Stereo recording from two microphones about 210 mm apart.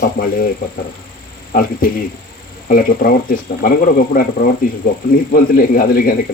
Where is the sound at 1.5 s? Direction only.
45° left (ahead or behind).